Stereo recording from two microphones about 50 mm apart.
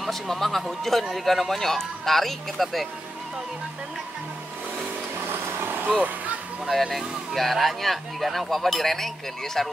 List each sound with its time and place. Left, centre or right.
0.0 s speech: centre
5.2 s a sound: right
6.7 s speech: centre